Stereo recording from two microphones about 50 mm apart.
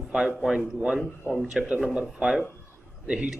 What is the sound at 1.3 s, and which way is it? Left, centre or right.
Speech, right.